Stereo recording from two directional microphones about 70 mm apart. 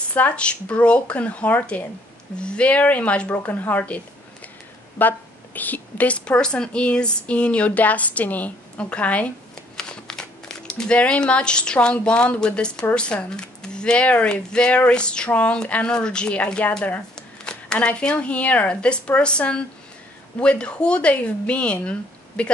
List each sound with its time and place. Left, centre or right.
0.1 s a woman's voice: centre